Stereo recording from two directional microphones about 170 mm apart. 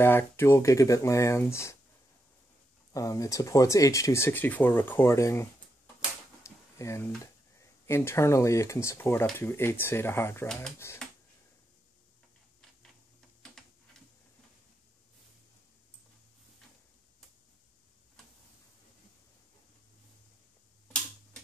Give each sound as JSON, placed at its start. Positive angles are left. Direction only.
{"t": 0.0, "sound": "speech", "side_deg": 15}
{"t": 2.9, "sound": "speech", "side_deg": 20}
{"t": 6.4, "sound": "a sound", "side_deg": 15}
{"t": 7.8, "sound": "speech", "side_deg": 15}